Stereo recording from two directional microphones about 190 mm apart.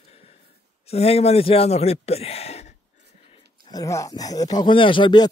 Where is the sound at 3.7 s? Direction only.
20° left (ahead or behind).